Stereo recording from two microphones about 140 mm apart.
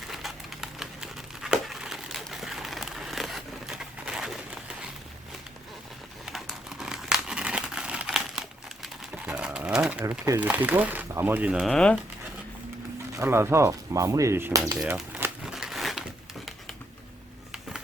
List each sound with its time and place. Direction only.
0.1 s crumpling: centre (ahead or behind)
6.2 s crumpling: 5° right (ahead or behind)
10.2 s speech: 15° right (ahead or behind); by 11.9 s 5° left (ahead or behind)
13.1 s speech: 15° right (ahead or behind)
14.8 s speech: 5° right (ahead or behind)
15.2 s a sound: 5° right (ahead or behind)